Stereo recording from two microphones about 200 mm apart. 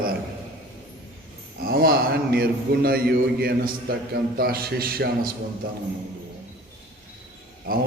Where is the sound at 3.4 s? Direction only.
50° right (ahead or behind).